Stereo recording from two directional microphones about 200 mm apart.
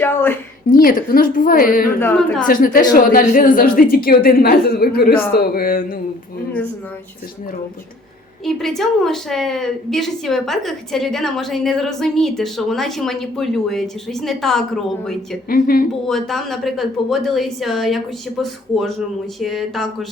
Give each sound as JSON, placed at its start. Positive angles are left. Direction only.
{"t": 0.0, "sound": "a woman's voice", "side_deg": 10}
{"t": 0.7, "sound": "speech", "side_deg": 45}
{"t": 2.0, "sound": "a woman's voice", "side_deg": 5}
{"t": 2.5, "sound": "speech", "side_deg": 45}
{"t": 8.4, "sound": "a woman's voice", "side_deg": 0}
{"t": 15.4, "sound": "speech", "side_deg": 45}
{"t": 16.0, "sound": "a woman's voice", "side_deg": 0}